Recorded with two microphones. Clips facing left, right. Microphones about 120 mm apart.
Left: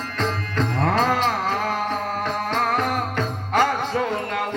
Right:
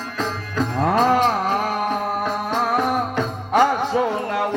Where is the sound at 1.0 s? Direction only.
20° right (ahead or behind).